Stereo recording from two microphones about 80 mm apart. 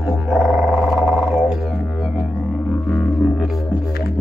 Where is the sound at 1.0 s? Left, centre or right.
Right.